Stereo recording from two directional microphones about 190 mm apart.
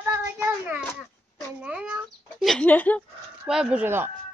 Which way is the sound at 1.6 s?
5° right (ahead or behind).